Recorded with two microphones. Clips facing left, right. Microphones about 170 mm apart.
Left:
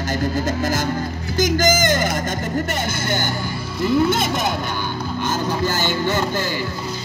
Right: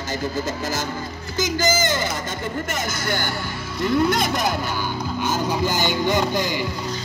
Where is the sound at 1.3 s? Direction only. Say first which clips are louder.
Left 4 dB; 50° left (ahead or behind).